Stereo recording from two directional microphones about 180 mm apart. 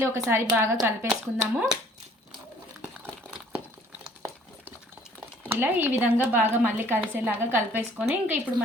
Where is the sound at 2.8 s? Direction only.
5° right (ahead or behind).